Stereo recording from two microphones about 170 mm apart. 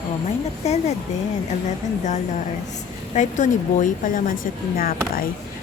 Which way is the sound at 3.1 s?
45° left (ahead or behind).